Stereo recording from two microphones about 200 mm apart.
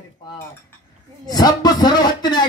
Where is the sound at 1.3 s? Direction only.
20° left (ahead or behind).